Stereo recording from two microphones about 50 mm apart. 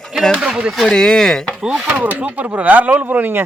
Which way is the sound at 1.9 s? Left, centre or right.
Right.